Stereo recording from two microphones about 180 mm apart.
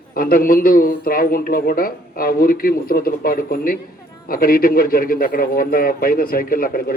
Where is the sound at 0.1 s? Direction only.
55° left (ahead or behind).